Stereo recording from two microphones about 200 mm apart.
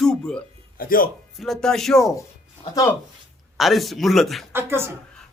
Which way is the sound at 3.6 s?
Centre (ahead or behind).